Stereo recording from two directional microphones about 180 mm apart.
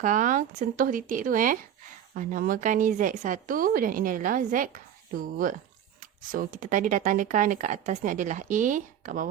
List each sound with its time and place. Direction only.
0.0 s speech: 45° right (ahead or behind)